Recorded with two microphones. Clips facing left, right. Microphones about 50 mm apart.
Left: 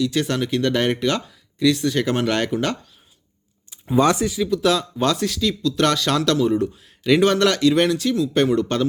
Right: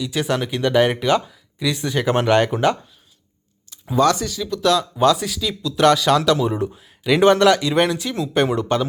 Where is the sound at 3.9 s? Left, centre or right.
Centre.